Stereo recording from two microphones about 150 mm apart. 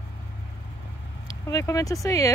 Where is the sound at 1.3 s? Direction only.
20° left (ahead or behind).